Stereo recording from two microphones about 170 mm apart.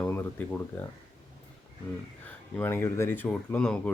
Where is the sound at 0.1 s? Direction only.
10° left (ahead or behind).